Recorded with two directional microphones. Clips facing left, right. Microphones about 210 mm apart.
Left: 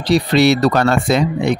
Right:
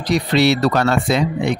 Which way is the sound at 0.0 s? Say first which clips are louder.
Left 3 dB; 30° left (ahead or behind).